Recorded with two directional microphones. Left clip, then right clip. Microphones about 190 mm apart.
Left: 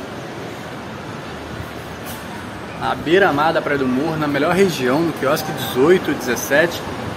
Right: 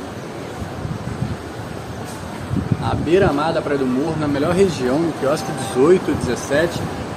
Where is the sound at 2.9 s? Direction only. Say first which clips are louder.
Left 2 dB; centre (ahead or behind).